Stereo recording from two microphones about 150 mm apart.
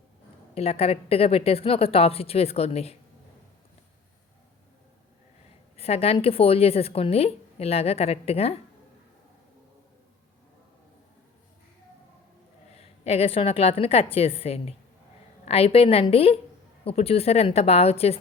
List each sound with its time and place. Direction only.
0.5 s speech: 40° left (ahead or behind)
5.7 s speech: 40° left (ahead or behind)
12.7 s speech: 40° left (ahead or behind)